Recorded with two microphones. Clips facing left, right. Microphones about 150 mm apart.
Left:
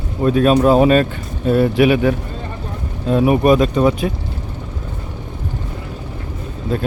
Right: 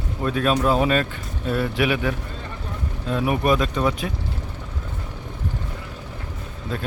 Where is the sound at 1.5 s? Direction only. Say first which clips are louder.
Left 9 dB; 40° left (ahead or behind).